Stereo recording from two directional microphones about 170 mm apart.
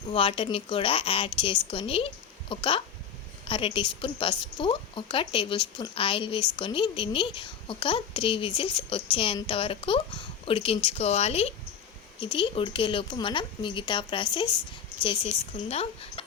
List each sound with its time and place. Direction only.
0.1 s a woman's voice: 30° left (ahead or behind)